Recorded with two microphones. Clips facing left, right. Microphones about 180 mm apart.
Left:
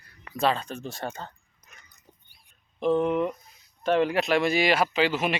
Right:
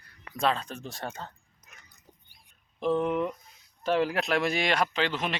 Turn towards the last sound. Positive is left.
turn(degrees=10)  # may be behind; listen again after turning